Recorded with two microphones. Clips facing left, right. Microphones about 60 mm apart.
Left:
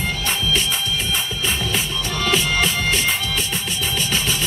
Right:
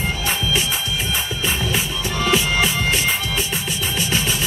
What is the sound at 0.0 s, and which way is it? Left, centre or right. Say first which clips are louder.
Music: even; centre.